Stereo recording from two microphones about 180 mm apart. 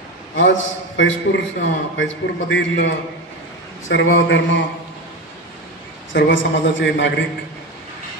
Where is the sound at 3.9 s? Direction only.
90° left.